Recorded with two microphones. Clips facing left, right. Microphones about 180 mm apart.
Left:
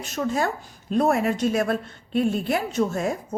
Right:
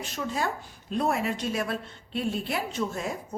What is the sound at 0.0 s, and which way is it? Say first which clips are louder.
A woman's voice: left 6 dB; 45° left (ahead or behind).